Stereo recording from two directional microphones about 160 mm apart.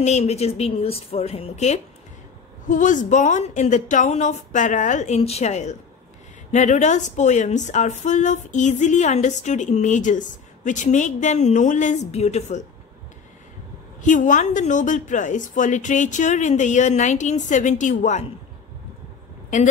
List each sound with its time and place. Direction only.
0.0 s a woman's voice: 45° left (ahead or behind)
2.6 s a woman's voice: 55° left (ahead or behind)
14.0 s a woman's voice: 50° left (ahead or behind)
19.5 s a woman's voice: 50° left (ahead or behind)